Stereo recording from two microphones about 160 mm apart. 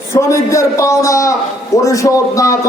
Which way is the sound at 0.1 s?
15° left (ahead or behind).